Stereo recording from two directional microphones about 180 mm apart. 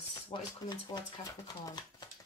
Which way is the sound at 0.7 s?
20° left (ahead or behind).